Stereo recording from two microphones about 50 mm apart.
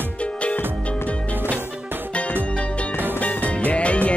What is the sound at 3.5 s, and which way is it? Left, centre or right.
Music, left.